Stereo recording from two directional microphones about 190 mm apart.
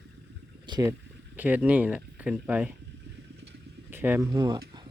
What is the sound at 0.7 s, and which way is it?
Speech, 15° right (ahead or behind).